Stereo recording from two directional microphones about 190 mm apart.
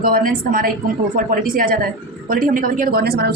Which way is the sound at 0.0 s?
45° right (ahead or behind).